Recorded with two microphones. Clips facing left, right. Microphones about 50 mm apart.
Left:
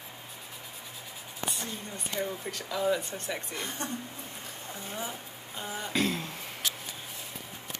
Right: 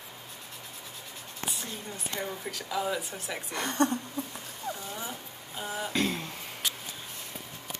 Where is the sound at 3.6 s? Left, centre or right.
Right.